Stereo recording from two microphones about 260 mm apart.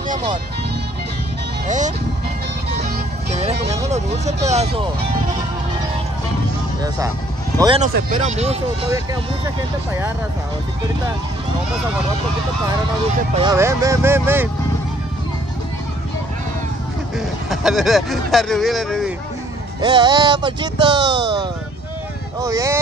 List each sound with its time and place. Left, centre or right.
1.7 s speech: right
2.7 s music: right
4.3 s speech: right
7.5 s speech: centre
7.8 s speech: right
13.4 s speech: centre
17.5 s speech: centre
19.8 s speech: centre